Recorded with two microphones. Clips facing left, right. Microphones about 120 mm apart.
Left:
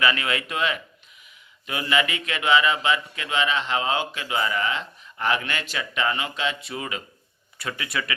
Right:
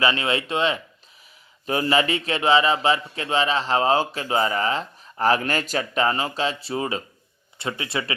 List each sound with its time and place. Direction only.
0.0 s speech: 30° right (ahead or behind)